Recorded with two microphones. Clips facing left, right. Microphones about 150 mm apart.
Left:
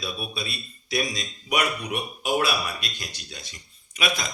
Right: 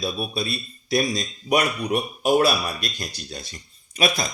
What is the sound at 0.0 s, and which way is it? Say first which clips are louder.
A man's voice: right 6 dB; 40° right (ahead or behind).